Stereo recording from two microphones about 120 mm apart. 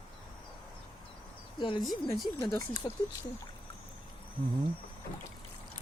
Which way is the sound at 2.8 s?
35° left (ahead or behind).